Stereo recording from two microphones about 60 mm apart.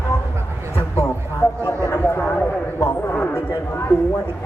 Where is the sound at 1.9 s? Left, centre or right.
Left.